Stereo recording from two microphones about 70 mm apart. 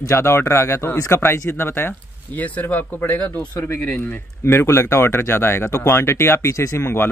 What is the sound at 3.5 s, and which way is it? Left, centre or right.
Speech, left.